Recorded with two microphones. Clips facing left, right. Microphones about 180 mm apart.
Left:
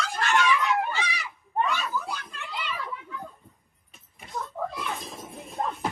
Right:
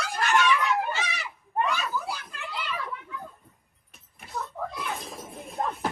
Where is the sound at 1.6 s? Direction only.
Centre (ahead or behind).